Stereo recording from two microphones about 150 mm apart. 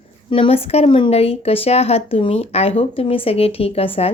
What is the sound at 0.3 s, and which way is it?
Speech, 40° left (ahead or behind).